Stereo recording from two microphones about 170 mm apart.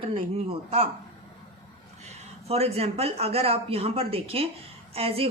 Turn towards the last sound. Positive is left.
turn(degrees=-35)  # may be behind; listen again after turning